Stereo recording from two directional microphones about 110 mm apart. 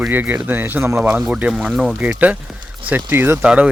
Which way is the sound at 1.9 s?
15° right (ahead or behind).